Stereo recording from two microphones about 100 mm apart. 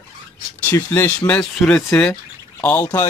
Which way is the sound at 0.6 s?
25° left (ahead or behind).